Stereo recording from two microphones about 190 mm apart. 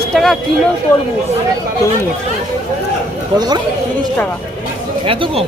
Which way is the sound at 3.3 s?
20° right (ahead or behind).